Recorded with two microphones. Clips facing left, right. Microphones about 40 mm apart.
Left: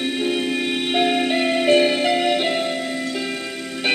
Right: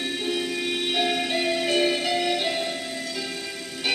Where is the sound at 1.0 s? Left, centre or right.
Left.